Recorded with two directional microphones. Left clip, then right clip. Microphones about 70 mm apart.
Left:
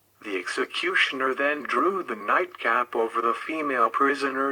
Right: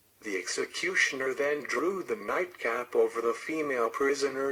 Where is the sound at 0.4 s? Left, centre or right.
Left.